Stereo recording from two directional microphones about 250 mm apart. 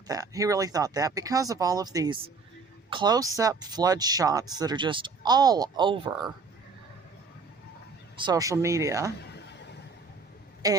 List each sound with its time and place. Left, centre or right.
0.1 s speech: centre
8.1 s speech: centre
9.3 s a sound: left
10.6 s speech: centre